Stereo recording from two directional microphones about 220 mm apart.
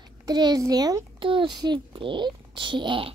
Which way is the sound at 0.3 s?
20° right (ahead or behind).